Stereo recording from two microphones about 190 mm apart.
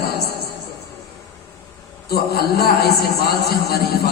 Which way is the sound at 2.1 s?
55° left (ahead or behind).